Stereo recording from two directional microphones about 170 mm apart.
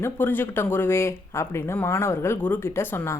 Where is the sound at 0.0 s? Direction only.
10° left (ahead or behind).